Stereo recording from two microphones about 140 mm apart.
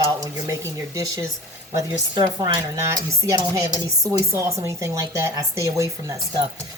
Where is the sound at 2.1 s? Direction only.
30° right (ahead or behind).